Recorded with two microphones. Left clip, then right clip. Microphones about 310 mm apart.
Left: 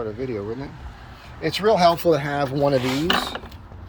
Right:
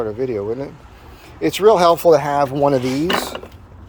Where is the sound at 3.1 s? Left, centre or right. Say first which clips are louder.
Right 2 dB; centre.